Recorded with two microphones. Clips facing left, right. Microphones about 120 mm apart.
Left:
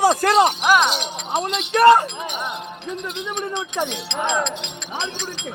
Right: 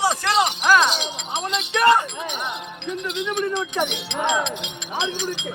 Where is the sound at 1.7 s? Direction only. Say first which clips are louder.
Left 5 dB; 40° left (ahead or behind).